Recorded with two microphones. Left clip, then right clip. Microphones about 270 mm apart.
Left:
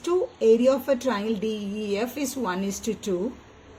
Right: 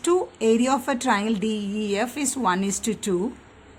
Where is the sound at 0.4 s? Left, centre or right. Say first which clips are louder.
Left 3 dB; right.